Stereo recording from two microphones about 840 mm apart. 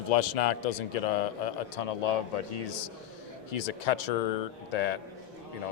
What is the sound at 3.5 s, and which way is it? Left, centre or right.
Speech, left.